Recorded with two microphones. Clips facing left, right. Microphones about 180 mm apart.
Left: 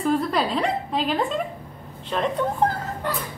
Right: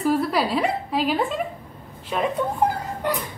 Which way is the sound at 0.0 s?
5° right (ahead or behind).